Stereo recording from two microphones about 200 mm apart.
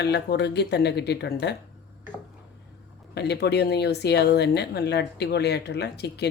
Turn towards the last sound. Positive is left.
turn(degrees=55)  # may be behind; listen again after turning